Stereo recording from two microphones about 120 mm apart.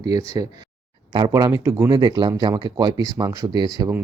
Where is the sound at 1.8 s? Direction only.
35° right (ahead or behind).